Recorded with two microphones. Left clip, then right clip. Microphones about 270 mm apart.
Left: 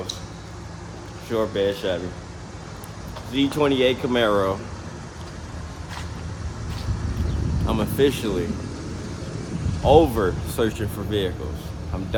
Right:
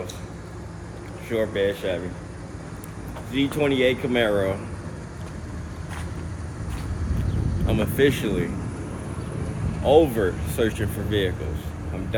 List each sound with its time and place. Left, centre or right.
1.3 s speech: centre
3.3 s speech: centre
7.7 s speech: centre
9.9 s speech: centre